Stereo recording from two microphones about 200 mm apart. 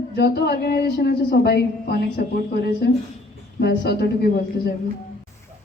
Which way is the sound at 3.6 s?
55° left (ahead or behind).